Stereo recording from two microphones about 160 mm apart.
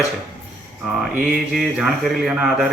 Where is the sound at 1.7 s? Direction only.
5° right (ahead or behind).